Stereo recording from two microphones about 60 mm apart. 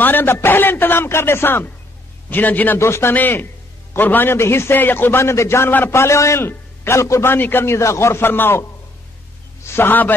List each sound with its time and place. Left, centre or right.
0.0 s a man's voice: left
2.8 s a man's voice: left
3.2 s a man's voice: left
5.7 s a man's voice: left
5.9 s a man's voice: left
7.2 s a man's voice: left
7.6 s a man's voice: left
9.7 s a man's voice: left